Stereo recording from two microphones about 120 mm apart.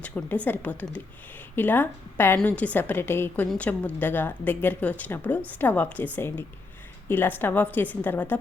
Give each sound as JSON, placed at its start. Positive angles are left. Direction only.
{"t": 0.0, "sound": "a woman's voice", "side_deg": 10}